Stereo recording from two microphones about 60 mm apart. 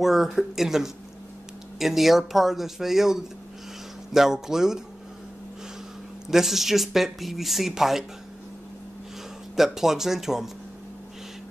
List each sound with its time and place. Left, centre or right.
0.0 s speech: centre
6.3 s speech: centre
9.6 s speech: centre